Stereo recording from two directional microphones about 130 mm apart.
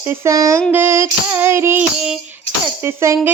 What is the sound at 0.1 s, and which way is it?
Female singing, 25° right (ahead or behind).